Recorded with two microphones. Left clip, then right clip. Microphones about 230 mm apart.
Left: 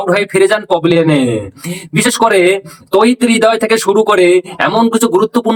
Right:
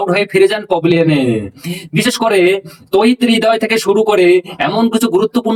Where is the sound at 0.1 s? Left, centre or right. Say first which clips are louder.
Left 3 dB; centre.